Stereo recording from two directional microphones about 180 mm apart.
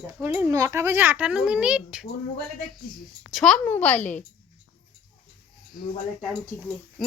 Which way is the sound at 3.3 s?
5° left (ahead or behind).